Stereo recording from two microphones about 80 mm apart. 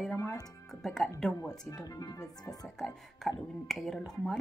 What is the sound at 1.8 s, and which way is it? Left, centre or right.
Speech, left.